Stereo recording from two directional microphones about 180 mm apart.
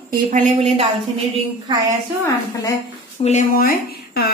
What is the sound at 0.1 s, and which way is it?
Speech, 45° right (ahead or behind).